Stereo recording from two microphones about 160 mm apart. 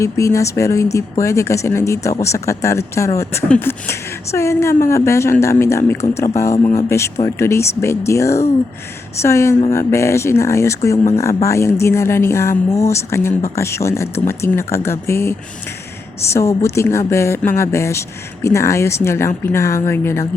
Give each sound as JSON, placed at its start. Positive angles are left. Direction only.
{"t": 0.0, "sound": "speech", "side_deg": 20}